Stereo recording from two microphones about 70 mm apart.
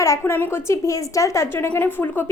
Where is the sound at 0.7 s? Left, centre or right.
Left.